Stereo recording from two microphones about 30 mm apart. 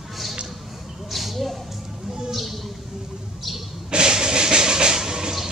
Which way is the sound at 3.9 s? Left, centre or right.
Right.